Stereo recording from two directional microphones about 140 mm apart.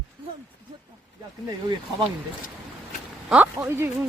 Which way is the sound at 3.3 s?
10° right (ahead or behind).